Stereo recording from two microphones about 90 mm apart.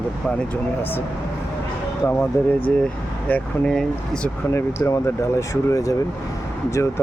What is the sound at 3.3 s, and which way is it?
Speech, 10° left (ahead or behind).